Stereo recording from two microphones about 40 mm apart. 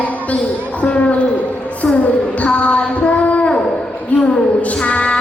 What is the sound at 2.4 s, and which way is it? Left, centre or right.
Child singing, left.